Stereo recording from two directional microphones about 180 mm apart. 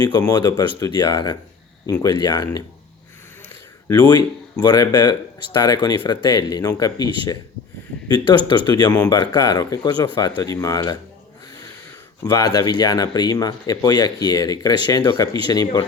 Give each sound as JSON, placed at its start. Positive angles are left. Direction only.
{"t": 0.3, "sound": "speech", "side_deg": 20}
{"t": 3.8, "sound": "speech", "side_deg": 25}
{"t": 12.2, "sound": "speech", "side_deg": 20}